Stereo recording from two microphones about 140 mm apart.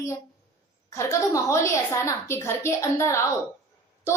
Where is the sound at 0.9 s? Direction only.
20° left (ahead or behind).